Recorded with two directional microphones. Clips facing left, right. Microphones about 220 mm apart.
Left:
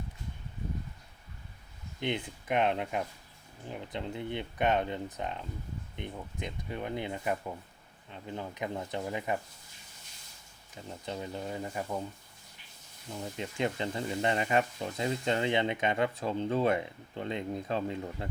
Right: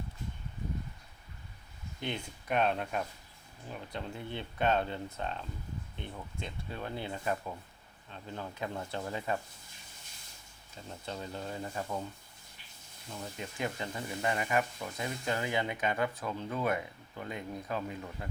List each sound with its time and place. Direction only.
2.0 s speech: 20° left (ahead or behind)
10.8 s speech: 15° left (ahead or behind)
13.1 s speech: 20° left (ahead or behind)